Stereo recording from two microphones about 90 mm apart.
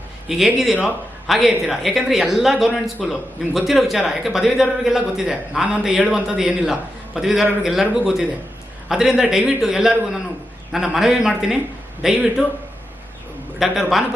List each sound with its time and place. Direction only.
0.3 s a man's voice: 5° right (ahead or behind)
13.6 s a man's voice: 5° right (ahead or behind)